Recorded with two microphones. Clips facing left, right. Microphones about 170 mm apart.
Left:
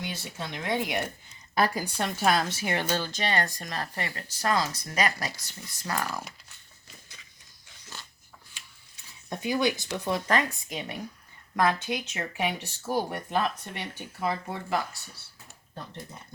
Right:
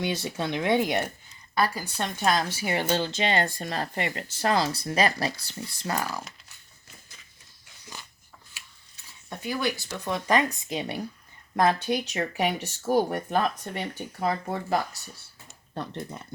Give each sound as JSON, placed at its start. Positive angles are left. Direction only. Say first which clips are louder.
{"t": 0.0, "sound": "speech", "louder": "right 8 dB", "side_deg": -75}
{"t": 1.5, "sound": "speech", "louder": "even", "side_deg": 15}
{"t": 2.0, "sound": "a woman's voice", "louder": "even", "side_deg": 5}
{"t": 2.6, "sound": "speech", "louder": "right 2 dB", "side_deg": -10}
{"t": 2.9, "sound": "speech", "louder": "right 3 dB", "side_deg": -20}
{"t": 7.9, "sound": "dog", "louder": "right 1 dB", "side_deg": -15}
{"t": 9.3, "sound": "speech", "louder": "left 2 dB", "side_deg": 15}
{"t": 10.2, "sound": "speech", "louder": "right 6 dB", "side_deg": -15}
{"t": 10.7, "sound": "speech", "louder": "right 5 dB", "side_deg": -35}
{"t": 15.7, "sound": "speech", "louder": "right 7 dB", "side_deg": -75}